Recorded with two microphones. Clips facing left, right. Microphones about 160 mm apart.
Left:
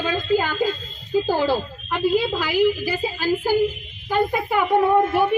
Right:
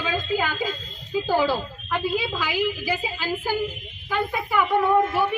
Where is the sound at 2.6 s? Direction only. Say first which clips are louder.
Left 7 dB; 45° left (ahead or behind).